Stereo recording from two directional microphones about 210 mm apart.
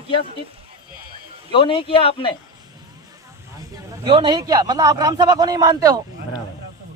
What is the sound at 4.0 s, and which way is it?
A man's voice, 25° right (ahead or behind).